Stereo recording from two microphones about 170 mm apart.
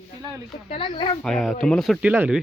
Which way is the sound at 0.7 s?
30° left (ahead or behind).